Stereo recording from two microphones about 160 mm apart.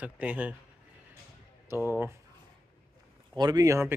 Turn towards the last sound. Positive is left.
turn(degrees=-20)  # may be behind; listen again after turning